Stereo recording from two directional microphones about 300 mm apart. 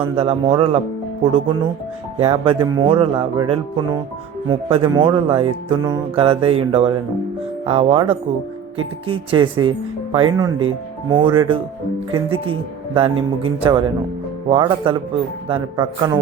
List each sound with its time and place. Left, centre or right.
0.2 s speech: centre
2.1 s music: centre
7.6 s speech: centre
9.0 s music: centre